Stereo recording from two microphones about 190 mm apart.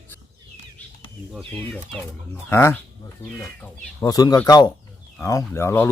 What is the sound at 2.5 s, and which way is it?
Speech, 15° left (ahead or behind).